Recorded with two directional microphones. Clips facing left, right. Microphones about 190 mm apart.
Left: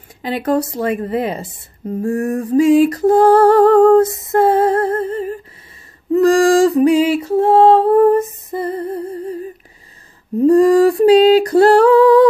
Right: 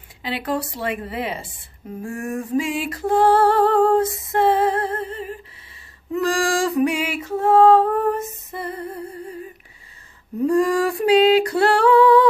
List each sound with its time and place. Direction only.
0.2 s music: 45° left (ahead or behind)
6.1 s female singing: 40° left (ahead or behind)